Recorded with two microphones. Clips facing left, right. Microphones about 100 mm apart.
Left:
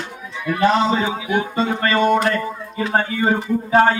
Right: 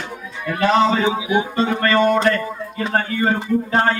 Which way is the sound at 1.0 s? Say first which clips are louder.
Right 2 dB; 20° right (ahead or behind).